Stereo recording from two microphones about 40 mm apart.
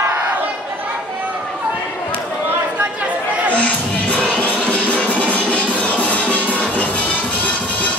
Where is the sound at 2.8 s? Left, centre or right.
Right.